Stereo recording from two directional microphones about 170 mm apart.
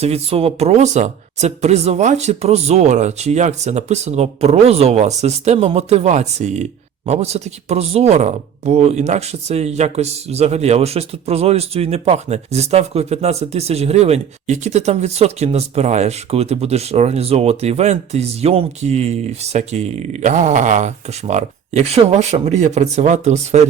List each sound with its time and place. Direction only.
0.0 s speech: 35° right (ahead or behind)